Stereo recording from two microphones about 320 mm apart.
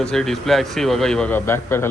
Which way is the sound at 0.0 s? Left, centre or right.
Centre.